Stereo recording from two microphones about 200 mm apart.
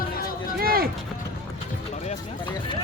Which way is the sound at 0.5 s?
50° right (ahead or behind).